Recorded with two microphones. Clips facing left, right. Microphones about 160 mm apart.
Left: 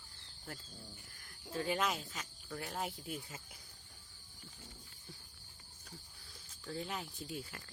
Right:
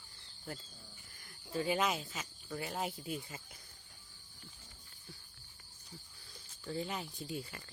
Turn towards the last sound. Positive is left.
turn(degrees=0)  # may be behind; listen again after turning